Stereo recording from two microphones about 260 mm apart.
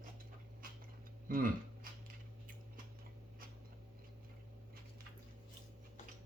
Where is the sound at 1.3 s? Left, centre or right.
Right.